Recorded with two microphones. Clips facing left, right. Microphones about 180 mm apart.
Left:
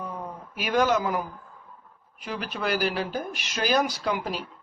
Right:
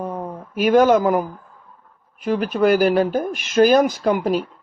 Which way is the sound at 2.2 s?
50° right (ahead or behind).